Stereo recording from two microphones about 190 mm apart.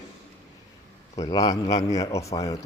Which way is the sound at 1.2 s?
20° left (ahead or behind).